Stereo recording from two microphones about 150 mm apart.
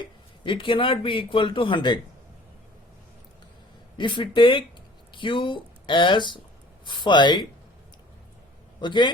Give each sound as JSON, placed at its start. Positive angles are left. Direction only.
{"t": 0.0, "sound": "a man's voice", "side_deg": 35}
{"t": 3.9, "sound": "speech", "side_deg": 30}
{"t": 8.8, "sound": "speech", "side_deg": 30}